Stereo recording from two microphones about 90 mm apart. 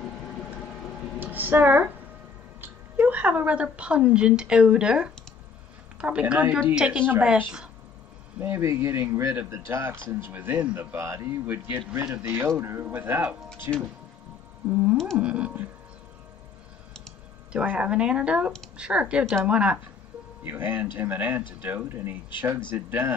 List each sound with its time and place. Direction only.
1.2 s speech: 20° right (ahead or behind)
8.4 s speech: 25° right (ahead or behind)
11.0 s speech: 30° right (ahead or behind)
13.7 s speech: 35° right (ahead or behind)
14.7 s speech: 15° right (ahead or behind)
17.5 s speech: 15° right (ahead or behind)